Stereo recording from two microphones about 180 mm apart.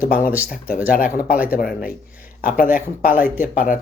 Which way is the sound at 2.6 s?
50° left (ahead or behind).